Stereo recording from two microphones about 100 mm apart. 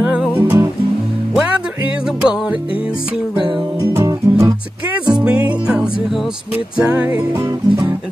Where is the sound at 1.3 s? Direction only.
10° right (ahead or behind).